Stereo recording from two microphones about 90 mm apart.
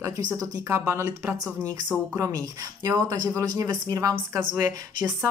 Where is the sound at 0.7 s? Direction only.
30° right (ahead or behind).